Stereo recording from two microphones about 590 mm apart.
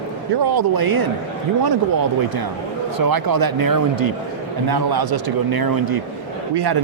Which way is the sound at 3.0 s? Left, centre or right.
Right.